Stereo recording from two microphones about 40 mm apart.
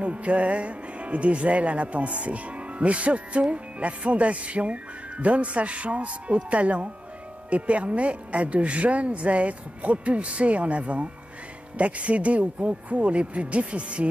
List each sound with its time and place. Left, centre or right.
0.0 s speech: right